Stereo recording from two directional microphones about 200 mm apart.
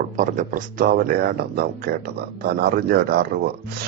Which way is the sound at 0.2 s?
40° right (ahead or behind).